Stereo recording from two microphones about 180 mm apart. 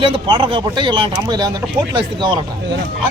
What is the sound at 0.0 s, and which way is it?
Speech, 25° right (ahead or behind).